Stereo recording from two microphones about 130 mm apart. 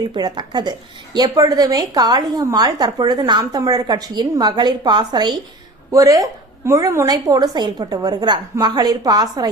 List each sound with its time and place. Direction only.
0.1 s a woman's voice: 35° right (ahead or behind)